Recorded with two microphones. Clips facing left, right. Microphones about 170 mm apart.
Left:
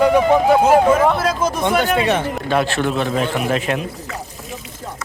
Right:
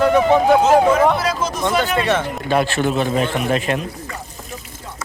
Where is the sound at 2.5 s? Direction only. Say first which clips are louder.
Right 1 dB; centre (ahead or behind).